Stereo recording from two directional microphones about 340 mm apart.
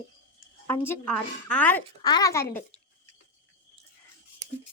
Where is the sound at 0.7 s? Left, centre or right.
Centre.